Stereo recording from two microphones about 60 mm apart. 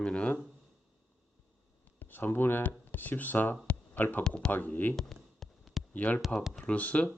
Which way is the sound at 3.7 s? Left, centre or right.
Left.